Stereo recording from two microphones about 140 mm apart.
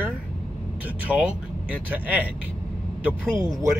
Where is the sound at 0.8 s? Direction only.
10° right (ahead or behind).